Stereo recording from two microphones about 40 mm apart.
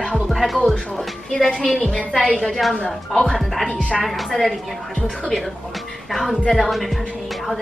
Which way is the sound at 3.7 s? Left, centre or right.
Left.